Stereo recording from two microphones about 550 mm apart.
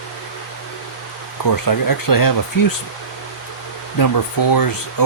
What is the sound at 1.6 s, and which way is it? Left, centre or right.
Speech, left.